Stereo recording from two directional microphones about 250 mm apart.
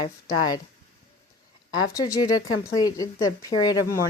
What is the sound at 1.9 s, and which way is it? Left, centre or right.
Speech, centre.